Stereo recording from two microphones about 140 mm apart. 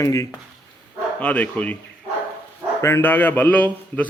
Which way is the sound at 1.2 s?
10° left (ahead or behind).